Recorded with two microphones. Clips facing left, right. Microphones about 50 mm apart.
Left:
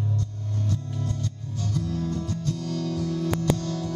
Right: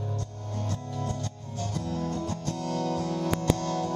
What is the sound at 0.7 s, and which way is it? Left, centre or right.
Music, right.